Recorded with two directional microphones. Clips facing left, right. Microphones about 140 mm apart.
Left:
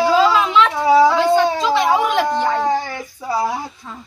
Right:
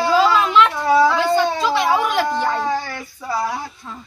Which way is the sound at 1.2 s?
10° right (ahead or behind).